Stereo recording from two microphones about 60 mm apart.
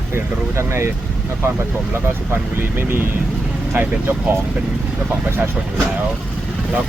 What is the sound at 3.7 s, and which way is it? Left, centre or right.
Speech, right.